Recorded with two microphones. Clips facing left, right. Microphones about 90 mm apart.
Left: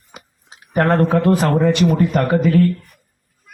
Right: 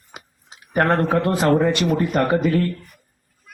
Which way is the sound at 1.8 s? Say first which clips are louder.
Left 4 dB; 10° left (ahead or behind).